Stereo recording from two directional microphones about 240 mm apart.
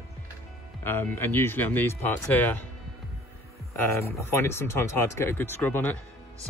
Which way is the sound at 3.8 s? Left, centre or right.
Centre.